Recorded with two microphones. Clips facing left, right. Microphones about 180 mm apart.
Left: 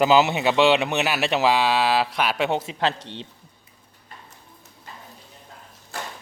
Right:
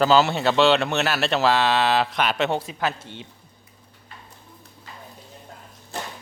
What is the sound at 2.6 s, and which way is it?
Speech, 25° left (ahead or behind).